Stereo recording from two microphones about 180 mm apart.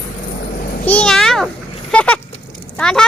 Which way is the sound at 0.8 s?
5° left (ahead or behind).